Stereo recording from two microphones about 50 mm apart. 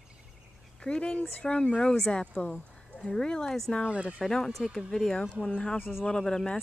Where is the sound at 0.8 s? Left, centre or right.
Centre.